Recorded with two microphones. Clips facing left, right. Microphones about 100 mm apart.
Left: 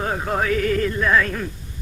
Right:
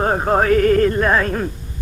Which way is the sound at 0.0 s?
45° right (ahead or behind).